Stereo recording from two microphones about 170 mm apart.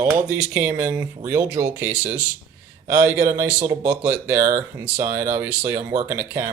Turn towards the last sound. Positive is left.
turn(degrees=-15)  # may be behind; listen again after turning